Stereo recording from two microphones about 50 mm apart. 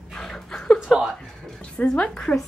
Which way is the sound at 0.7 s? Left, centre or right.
Centre.